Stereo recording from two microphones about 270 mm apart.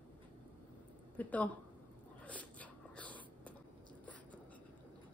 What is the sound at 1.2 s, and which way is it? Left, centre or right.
Speech, centre.